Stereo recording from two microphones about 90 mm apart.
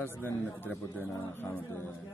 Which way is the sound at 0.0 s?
20° left (ahead or behind).